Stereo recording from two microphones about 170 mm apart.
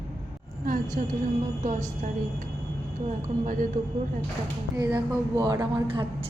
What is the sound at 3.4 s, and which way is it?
Speech, 50° right (ahead or behind).